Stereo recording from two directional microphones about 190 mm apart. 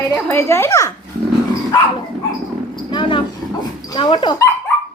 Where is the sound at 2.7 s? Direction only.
25° left (ahead or behind).